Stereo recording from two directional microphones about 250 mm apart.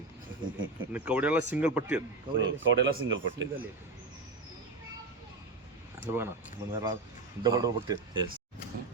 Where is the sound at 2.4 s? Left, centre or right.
Right.